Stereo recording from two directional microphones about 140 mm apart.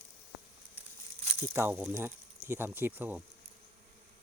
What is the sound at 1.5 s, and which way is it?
Speech, 15° right (ahead or behind).